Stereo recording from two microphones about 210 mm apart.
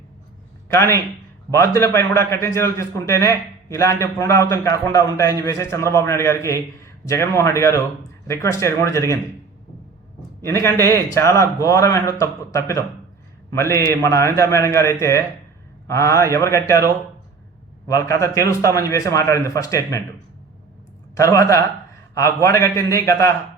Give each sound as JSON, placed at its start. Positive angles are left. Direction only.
{"t": 0.7, "sound": "a man's voice", "side_deg": 15}
{"t": 10.4, "sound": "a man's voice", "side_deg": 10}
{"t": 21.2, "sound": "a man's voice", "side_deg": 15}